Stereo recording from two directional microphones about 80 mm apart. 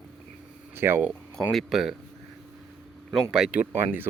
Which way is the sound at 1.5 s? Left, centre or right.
Centre.